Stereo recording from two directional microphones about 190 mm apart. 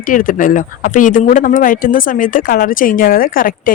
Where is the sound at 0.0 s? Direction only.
45° left (ahead or behind).